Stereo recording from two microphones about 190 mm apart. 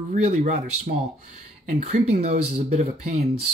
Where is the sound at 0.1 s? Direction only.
40° right (ahead or behind).